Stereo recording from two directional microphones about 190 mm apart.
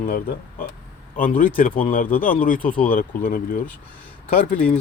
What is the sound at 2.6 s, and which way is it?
Speech, 5° left (ahead or behind).